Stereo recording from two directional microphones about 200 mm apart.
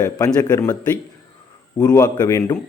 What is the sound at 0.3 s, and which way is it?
Speech, 20° left (ahead or behind).